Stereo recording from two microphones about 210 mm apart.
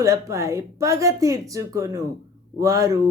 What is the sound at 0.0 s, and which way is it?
Speech, 15° right (ahead or behind).